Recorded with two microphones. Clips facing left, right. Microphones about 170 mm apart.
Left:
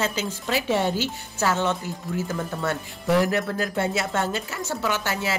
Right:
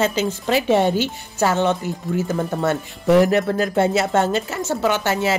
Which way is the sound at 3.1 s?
25° right (ahead or behind).